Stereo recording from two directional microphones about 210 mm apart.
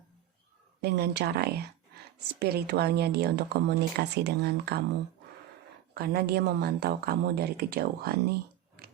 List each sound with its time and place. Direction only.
0.8 s a woman's voice: 50° right (ahead or behind)
5.9 s a woman's voice: 50° right (ahead or behind)